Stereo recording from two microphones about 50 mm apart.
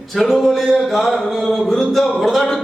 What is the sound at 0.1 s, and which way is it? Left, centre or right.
A man's voice, centre.